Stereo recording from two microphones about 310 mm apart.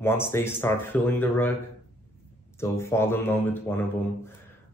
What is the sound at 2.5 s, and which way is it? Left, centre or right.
Speech, centre.